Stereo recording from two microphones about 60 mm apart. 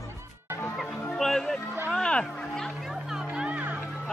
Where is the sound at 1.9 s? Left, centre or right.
Centre.